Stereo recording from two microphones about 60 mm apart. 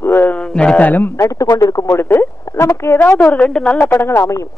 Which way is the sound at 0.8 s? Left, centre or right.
Left.